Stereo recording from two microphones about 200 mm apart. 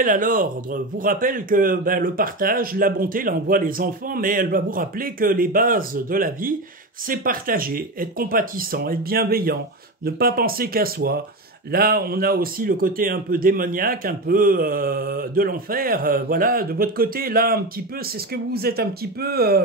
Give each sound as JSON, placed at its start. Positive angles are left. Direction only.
{"t": 0.0, "sound": "speech", "side_deg": -40}